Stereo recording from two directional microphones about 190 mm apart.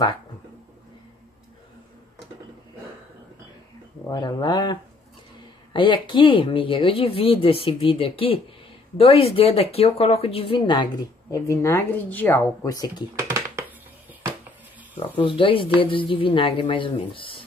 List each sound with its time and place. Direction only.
4.1 s speech: 25° left (ahead or behind)
11.3 s speech: 15° left (ahead or behind)
13.2 s a sound: 15° right (ahead or behind)
15.1 s speech: 25° left (ahead or behind)